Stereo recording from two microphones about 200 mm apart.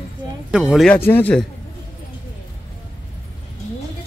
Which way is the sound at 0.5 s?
5° right (ahead or behind).